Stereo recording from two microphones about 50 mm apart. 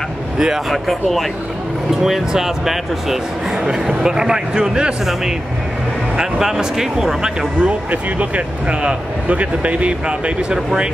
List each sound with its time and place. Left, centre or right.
0.7 s speech: centre
6.1 s speech: centre
7.6 s speech: right